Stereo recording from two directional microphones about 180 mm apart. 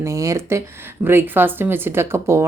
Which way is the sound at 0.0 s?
15° right (ahead or behind).